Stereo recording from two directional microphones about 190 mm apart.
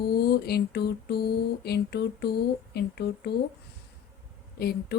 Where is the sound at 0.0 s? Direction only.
55° left (ahead or behind).